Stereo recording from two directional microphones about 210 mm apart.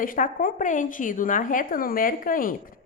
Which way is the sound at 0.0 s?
40° left (ahead or behind).